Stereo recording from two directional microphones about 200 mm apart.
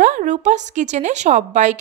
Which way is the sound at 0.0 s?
40° right (ahead or behind).